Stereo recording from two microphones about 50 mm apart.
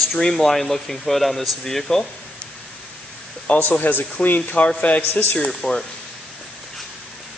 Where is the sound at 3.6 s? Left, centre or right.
Left.